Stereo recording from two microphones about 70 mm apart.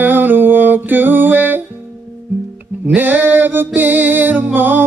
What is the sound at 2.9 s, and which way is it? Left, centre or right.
Male singing, right.